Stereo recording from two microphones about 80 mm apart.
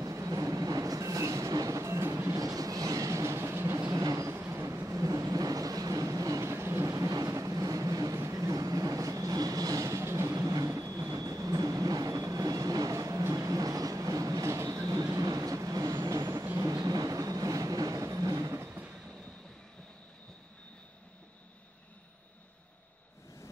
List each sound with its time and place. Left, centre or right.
0.0 s train: right
3.8 s train: right
4.4 s vehicle: right
8.2 s train: right